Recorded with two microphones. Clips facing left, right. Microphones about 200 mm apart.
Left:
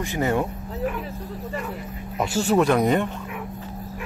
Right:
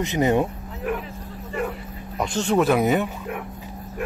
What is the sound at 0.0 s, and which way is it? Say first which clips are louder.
Speech: right 3 dB; 20° right (ahead or behind).